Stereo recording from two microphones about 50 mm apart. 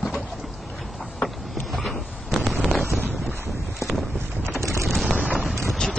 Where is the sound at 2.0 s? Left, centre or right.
Centre.